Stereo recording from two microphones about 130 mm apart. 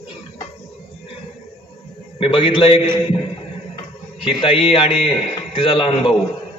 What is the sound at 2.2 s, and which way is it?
Speech, 40° left (ahead or behind).